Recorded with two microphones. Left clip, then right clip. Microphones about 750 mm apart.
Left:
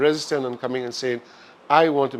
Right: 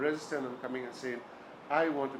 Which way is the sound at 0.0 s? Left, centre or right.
Left.